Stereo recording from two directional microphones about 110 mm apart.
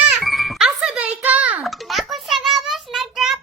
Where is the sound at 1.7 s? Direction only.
Centre (ahead or behind).